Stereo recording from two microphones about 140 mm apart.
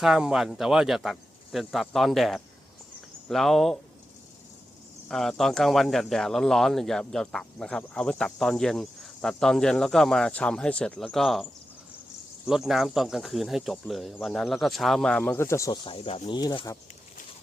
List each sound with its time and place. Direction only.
0.0 s speech: 5° right (ahead or behind)
5.0 s speech: 5° left (ahead or behind)
12.5 s speech: 5° right (ahead or behind)
15.4 s speech: 20° left (ahead or behind)
15.8 s speech: 40° left (ahead or behind)
16.2 s speech: 30° left (ahead or behind)